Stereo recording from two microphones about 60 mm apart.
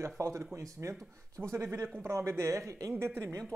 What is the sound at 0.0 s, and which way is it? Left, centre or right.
Speech, right.